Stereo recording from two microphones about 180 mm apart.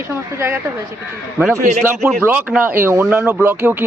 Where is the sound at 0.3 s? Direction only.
15° right (ahead or behind).